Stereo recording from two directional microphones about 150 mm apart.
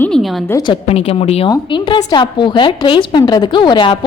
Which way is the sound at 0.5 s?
30° left (ahead or behind).